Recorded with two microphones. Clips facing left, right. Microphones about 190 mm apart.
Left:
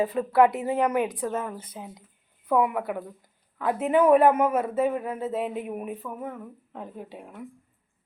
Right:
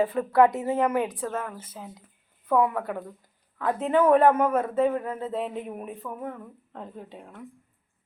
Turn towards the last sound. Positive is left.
turn(degrees=10)  # may be behind; listen again after turning